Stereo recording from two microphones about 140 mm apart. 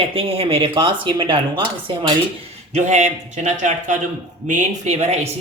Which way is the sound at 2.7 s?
55° right (ahead or behind).